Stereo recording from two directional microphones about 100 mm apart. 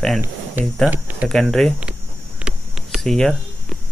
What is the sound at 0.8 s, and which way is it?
Speech, 15° right (ahead or behind).